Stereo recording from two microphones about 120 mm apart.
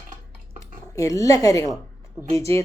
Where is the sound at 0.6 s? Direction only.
25° left (ahead or behind).